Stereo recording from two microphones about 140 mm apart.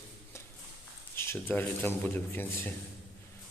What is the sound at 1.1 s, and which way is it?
Speech, 15° left (ahead or behind).